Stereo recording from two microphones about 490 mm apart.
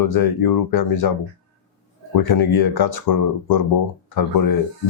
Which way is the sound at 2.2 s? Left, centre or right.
Left.